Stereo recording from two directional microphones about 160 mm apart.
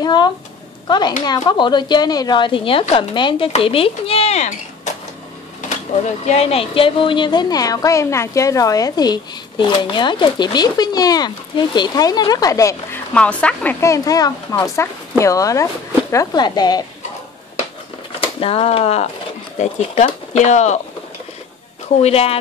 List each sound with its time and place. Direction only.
0.0 s a woman's voice: 25° left (ahead or behind); by 4.9 s 45° left (ahead or behind)
6.2 s a woman's voice: 40° left (ahead or behind); by 13.0 s 20° left (ahead or behind)
13.1 s a woman's voice: 5° left (ahead or behind); by 16.8 s 25° left (ahead or behind)
18.2 s speech: 35° left (ahead or behind)
20.1 s speech: 45° left (ahead or behind)
22.0 s speech: 40° left (ahead or behind)